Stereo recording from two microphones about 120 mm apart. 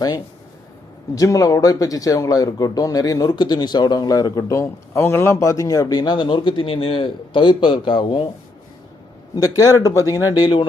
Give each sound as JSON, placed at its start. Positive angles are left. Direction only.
{"t": 1.1, "sound": "speech", "side_deg": 30}
{"t": 9.3, "sound": "speech", "side_deg": 30}